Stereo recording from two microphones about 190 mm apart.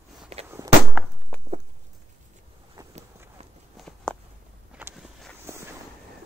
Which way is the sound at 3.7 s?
5° left (ahead or behind).